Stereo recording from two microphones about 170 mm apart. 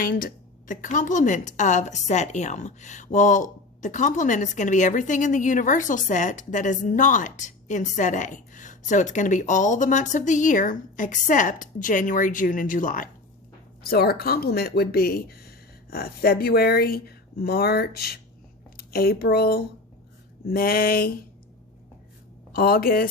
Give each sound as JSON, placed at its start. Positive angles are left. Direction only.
{"t": 0.0, "sound": "a woman's voice", "side_deg": 55}
{"t": 13.8, "sound": "speech", "side_deg": 65}
{"t": 22.5, "sound": "speech", "side_deg": 60}